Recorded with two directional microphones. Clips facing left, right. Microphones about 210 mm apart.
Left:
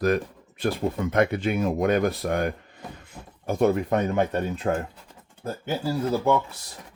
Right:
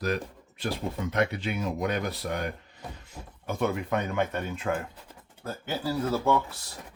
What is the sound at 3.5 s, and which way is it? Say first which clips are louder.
Speech: left 7 dB; 40° left (ahead or behind).